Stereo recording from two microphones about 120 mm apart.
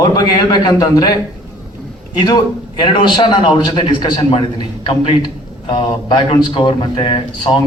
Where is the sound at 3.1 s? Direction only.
40° left (ahead or behind).